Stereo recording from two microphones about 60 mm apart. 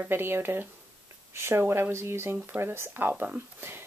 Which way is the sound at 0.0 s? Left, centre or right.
Right.